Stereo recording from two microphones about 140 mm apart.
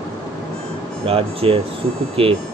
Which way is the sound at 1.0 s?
45° right (ahead or behind).